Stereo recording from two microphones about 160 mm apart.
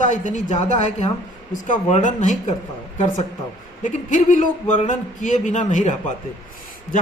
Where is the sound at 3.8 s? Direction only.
55° left (ahead or behind).